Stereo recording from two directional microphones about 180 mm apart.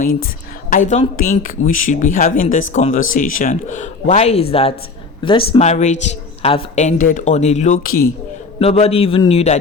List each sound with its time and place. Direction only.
0.9 s speech: 45° left (ahead or behind); by 5.5 s 30° left (ahead or behind)
5.5 s speech: 40° left (ahead or behind)
8.5 s speech: 35° left (ahead or behind)